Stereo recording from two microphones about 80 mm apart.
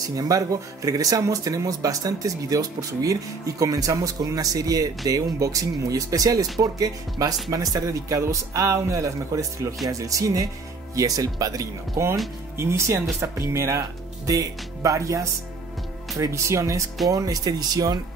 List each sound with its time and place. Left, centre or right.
0.1 s speech: right
12.5 s speech: right